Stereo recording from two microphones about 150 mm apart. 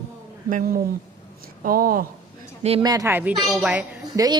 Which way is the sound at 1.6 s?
75° right (ahead or behind).